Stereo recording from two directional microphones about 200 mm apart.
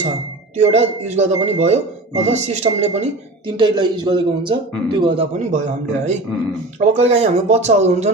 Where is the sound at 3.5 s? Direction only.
20° right (ahead or behind).